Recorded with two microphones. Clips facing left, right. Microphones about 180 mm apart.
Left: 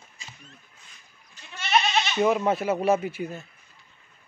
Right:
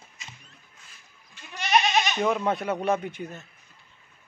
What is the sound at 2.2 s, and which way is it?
Speech, 5° left (ahead or behind).